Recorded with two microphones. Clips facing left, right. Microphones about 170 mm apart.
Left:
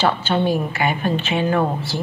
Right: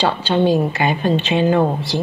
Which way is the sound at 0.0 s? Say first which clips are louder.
Right 2 dB; 15° right (ahead or behind).